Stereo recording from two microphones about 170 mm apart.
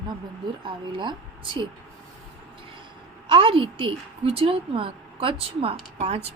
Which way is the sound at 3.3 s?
30° right (ahead or behind).